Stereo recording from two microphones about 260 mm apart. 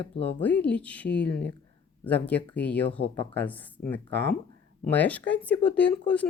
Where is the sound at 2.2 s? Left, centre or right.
Centre.